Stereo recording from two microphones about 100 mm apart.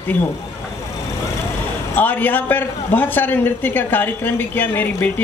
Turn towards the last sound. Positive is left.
turn(degrees=20)  # may be behind; listen again after turning